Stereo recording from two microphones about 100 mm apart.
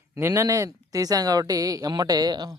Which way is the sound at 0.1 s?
25° right (ahead or behind).